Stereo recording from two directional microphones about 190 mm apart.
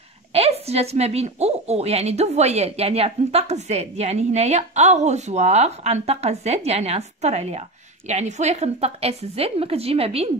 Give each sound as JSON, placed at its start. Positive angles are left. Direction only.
{"t": 0.3, "sound": "a woman's voice", "side_deg": -30}